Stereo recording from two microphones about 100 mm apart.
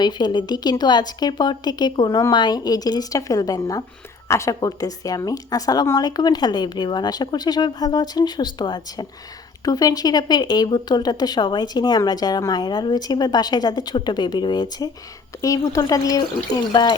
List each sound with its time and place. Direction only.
0.0 s a woman's voice: 45° left (ahead or behind)